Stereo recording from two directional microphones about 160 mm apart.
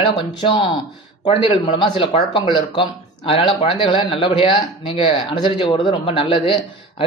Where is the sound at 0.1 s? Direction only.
30° left (ahead or behind).